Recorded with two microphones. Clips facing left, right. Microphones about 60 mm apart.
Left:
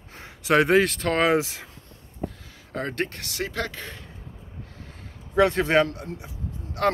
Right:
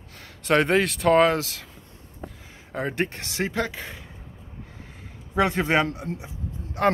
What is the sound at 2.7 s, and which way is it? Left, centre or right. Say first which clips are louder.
Speech: right 2 dB; centre.